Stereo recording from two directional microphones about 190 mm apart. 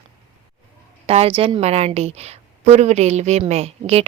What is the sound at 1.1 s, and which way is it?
A woman's voice, 30° right (ahead or behind).